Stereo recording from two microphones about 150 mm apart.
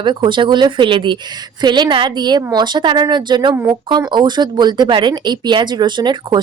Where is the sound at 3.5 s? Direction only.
15° right (ahead or behind).